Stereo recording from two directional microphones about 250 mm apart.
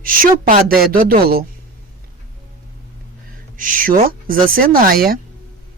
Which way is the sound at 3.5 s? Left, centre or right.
Right.